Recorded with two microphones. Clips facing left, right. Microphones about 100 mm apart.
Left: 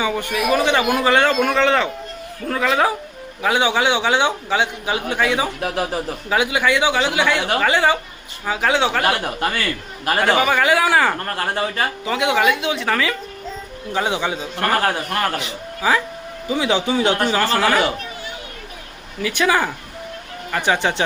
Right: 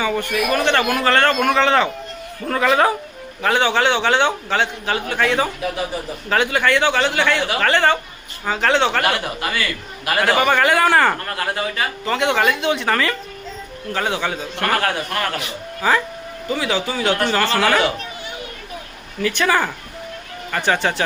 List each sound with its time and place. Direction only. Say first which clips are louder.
0.0 s a man's voice: even; 15° left (ahead or behind)
5.5 s speech: left 1 dB; 85° left
6.2 s a man's voice: right 1 dB; 5° left (ahead or behind)
9.4 s a man's voice: left 2 dB; 45° left (ahead or behind)
10.2 s speech: right 1 dB; centre (ahead or behind)
11.3 s speech: left 1 dB; 35° left (ahead or behind)
12.0 s speech: even; 5° left (ahead or behind)
13.9 s a man's voice: left 1 dB; 15° left (ahead or behind)
14.8 s speech: left 1 dB; 30° left (ahead or behind)
15.8 s a man's voice: even; 5° left (ahead or behind)
16.5 s speech: left 3 dB; 20° left (ahead or behind)
17.2 s a man's voice: even; 10° left (ahead or behind)
19.2 s a man's voice: even; 15° left (ahead or behind)